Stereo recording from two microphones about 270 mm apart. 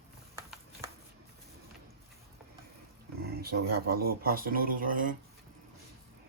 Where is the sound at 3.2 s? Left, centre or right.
Right.